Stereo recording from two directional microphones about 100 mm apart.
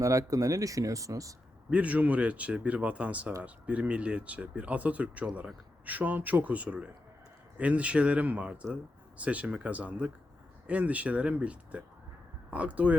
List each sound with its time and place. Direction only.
0.0 s speech: 35° right (ahead or behind)
1.7 s speech: 15° right (ahead or behind)